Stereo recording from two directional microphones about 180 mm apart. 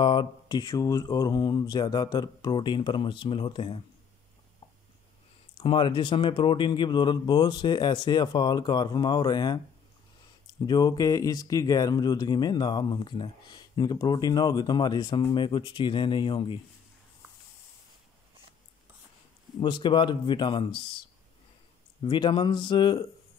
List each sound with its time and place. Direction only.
0.0 s speech: 25° left (ahead or behind)
5.6 s speech: 30° left (ahead or behind)
19.6 s speech: 25° left (ahead or behind)
22.0 s speech: 25° left (ahead or behind)